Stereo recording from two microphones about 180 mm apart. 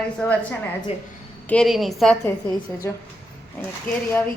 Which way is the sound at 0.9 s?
35° left (ahead or behind).